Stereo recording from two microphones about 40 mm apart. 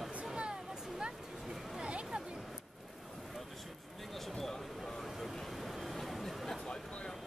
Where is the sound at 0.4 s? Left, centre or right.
Right.